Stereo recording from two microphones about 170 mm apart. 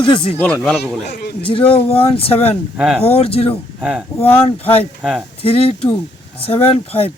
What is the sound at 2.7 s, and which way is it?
Speech, 5° right (ahead or behind).